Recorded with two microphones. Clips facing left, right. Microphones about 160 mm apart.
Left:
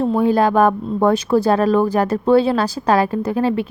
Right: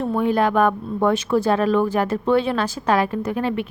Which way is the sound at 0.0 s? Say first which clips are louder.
Left 4 dB; 35° left (ahead or behind).